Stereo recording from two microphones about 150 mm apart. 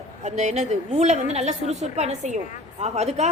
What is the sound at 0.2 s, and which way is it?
A woman's voice, 50° right (ahead or behind).